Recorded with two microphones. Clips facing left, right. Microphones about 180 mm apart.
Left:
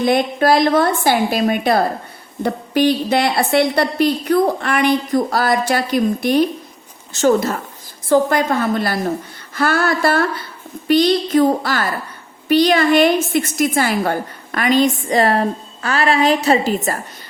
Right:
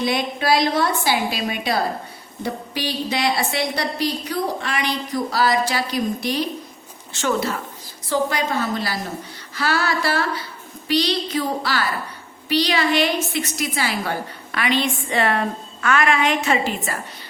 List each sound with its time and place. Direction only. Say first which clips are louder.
0.0 s a woman's voice: left 7 dB; 50° left (ahead or behind)
7.1 s a woman's voice: left 7 dB; 40° left (ahead or behind)